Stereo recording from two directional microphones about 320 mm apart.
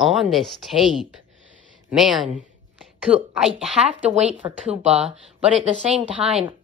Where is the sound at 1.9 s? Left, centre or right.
Centre.